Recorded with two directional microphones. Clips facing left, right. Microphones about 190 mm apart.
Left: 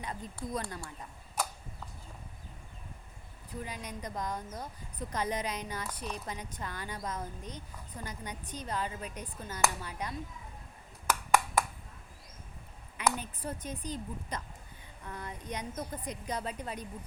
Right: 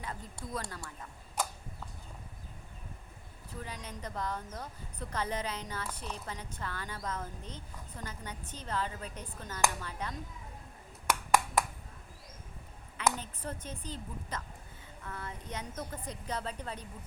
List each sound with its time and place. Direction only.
0.0 s speech: 20° left (ahead or behind)
3.6 s speech: 15° left (ahead or behind)
13.0 s speech: 10° left (ahead or behind)